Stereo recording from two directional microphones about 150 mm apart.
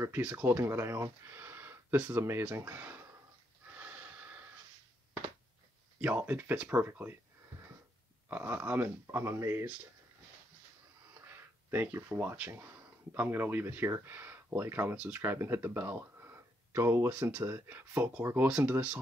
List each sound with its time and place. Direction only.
0.0 s speech: 15° right (ahead or behind)
3.7 s snort: 10° right (ahead or behind)
5.9 s speech: 10° right (ahead or behind)
8.3 s speech: 15° right (ahead or behind)
11.1 s speech: 15° right (ahead or behind)